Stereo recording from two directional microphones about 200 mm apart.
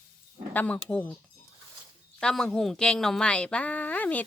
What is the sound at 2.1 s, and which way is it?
A woman's voice, 5° left (ahead or behind).